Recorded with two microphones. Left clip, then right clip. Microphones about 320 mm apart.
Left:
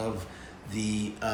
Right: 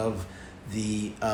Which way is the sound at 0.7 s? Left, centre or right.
Centre.